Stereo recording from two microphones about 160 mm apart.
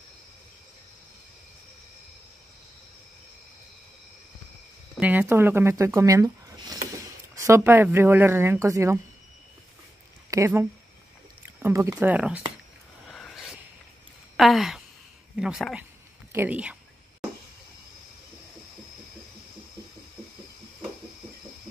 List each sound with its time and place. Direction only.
4.9 s speech: 10° right (ahead or behind)
10.3 s speech: 15° right (ahead or behind)
13.1 s vehicle: centre (ahead or behind)
14.3 s speech: centre (ahead or behind)